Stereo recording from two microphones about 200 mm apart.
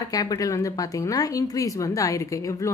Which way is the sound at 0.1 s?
20° left (ahead or behind).